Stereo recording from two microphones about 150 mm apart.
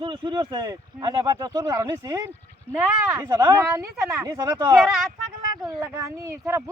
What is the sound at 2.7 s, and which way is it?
Speech, 5° right (ahead or behind).